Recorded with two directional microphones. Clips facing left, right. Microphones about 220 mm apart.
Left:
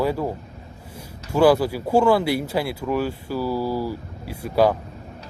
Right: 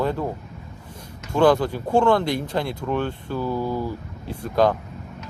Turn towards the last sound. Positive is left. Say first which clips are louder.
# left 1 dB
turn(degrees=10)  # may be behind; listen again after turning